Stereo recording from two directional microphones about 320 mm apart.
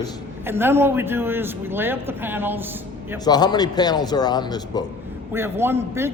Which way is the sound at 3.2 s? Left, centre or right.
Centre.